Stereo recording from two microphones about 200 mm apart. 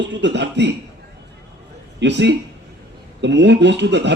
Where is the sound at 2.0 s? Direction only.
60° right (ahead or behind).